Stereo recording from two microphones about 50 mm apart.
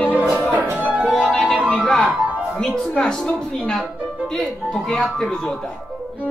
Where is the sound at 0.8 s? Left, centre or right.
Right.